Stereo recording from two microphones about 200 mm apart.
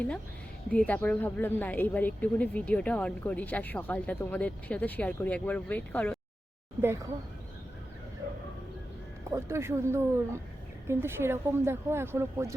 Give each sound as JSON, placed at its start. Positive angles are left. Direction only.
{"t": 0.7, "sound": "a woman's voice", "side_deg": 5}
{"t": 9.3, "sound": "speech", "side_deg": -15}